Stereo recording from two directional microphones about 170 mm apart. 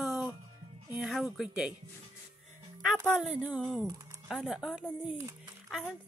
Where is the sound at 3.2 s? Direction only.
10° right (ahead or behind).